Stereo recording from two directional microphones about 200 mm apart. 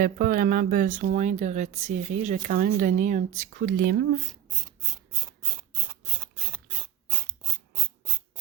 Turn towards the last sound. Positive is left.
turn(degrees=-10)  # may be behind; listen again after turning